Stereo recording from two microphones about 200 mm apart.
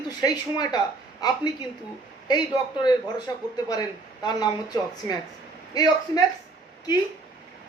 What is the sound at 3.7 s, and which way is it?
A man's voice, 20° left (ahead or behind).